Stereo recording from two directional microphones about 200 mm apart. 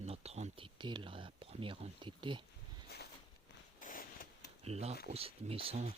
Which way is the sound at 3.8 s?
45° left (ahead or behind).